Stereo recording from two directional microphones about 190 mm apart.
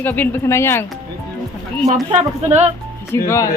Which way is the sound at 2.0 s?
35° right (ahead or behind).